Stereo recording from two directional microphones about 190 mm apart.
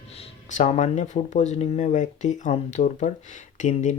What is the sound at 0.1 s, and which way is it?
Speech, 35° left (ahead or behind).